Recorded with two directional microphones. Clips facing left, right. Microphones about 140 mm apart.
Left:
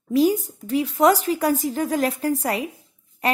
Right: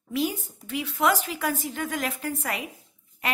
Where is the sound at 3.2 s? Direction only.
35° left (ahead or behind).